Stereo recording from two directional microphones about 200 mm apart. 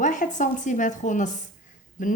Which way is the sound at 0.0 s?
40° left (ahead or behind).